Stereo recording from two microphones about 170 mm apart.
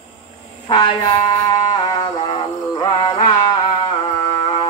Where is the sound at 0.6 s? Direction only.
30° left (ahead or behind).